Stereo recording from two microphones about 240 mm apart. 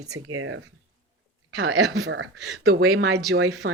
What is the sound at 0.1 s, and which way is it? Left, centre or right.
A woman's voice, right.